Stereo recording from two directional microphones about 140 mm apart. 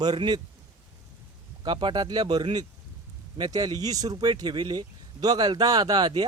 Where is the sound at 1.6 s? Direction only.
30° right (ahead or behind).